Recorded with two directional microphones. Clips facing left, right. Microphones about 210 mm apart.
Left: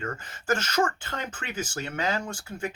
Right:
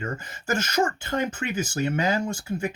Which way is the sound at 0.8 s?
25° right (ahead or behind).